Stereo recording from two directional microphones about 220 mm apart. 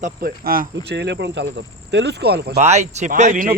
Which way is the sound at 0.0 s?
45° right (ahead or behind).